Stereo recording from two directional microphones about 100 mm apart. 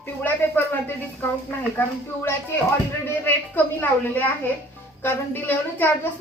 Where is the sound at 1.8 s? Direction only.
15° left (ahead or behind).